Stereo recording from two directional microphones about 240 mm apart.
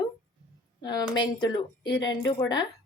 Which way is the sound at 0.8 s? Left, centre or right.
Centre.